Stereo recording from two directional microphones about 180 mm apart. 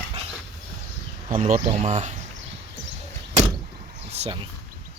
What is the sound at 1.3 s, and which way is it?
Speech, 45° right (ahead or behind).